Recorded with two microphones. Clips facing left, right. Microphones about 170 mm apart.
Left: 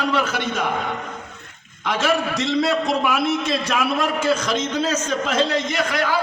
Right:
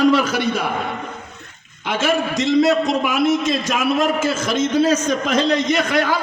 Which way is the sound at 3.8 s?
25° right (ahead or behind).